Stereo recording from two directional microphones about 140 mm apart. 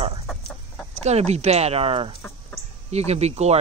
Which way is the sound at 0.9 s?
50° right (ahead or behind).